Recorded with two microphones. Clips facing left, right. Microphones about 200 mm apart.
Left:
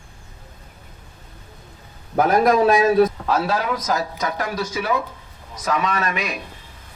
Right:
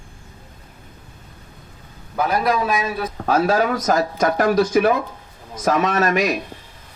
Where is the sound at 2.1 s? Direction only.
45° left (ahead or behind).